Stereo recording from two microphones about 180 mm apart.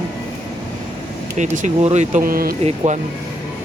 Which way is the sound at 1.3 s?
45° right (ahead or behind).